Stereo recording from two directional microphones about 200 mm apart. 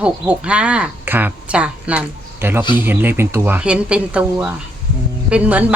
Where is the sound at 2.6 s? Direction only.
20° left (ahead or behind).